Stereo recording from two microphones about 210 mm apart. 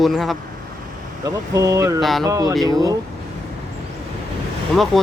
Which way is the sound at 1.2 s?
15° right (ahead or behind).